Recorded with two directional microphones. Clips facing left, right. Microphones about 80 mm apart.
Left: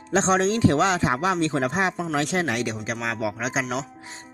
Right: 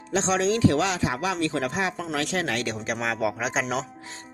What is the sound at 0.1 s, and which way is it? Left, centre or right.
Speech, left.